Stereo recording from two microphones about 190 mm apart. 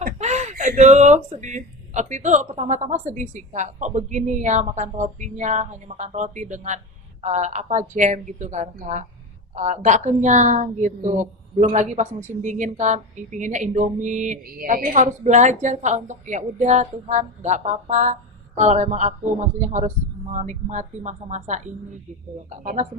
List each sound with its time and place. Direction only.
0.0 s a woman's voice: 35° right (ahead or behind)